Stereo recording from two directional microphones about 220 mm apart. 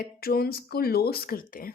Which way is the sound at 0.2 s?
45° left (ahead or behind).